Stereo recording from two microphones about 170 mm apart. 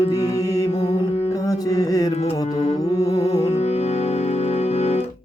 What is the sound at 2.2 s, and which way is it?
Music, 40° left (ahead or behind).